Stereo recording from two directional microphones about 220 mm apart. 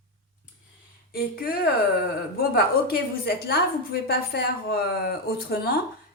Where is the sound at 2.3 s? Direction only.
45° left (ahead or behind).